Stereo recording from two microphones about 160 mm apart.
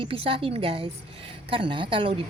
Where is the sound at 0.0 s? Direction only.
35° right (ahead or behind).